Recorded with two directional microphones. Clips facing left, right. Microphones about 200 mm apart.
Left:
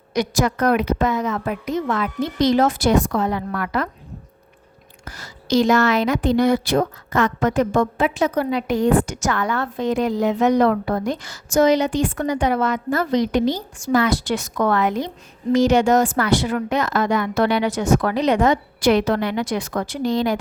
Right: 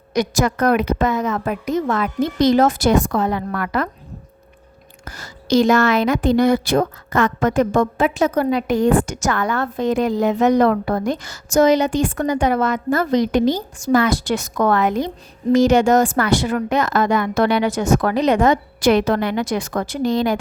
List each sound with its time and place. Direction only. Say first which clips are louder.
0.1 s a woman's voice: right 2 dB; 45° right (ahead or behind)
5.0 s a woman's voice: right 3 dB; 45° right (ahead or behind)